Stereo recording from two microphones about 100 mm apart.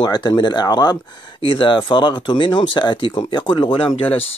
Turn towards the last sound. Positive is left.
turn(degrees=65)  # may be behind; listen again after turning